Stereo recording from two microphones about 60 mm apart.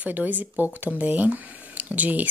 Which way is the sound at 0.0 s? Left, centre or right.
Right.